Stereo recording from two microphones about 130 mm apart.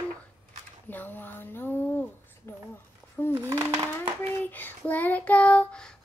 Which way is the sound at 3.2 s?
20° left (ahead or behind).